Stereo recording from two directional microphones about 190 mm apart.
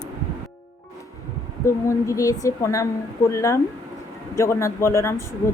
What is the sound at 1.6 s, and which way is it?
A woman's voice, 15° left (ahead or behind).